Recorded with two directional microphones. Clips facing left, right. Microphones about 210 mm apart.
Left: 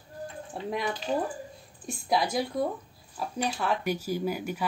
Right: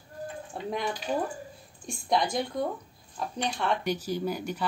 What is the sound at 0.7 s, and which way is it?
Speech, centre (ahead or behind).